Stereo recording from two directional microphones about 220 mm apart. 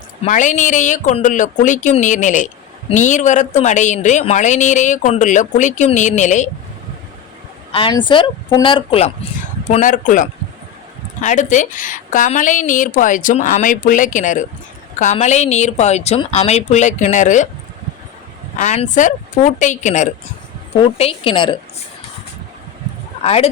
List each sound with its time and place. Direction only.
0.2 s speech: 35° left (ahead or behind)
7.7 s speech: 20° left (ahead or behind)
18.5 s speech: 30° left (ahead or behind)
23.2 s speech: 30° left (ahead or behind)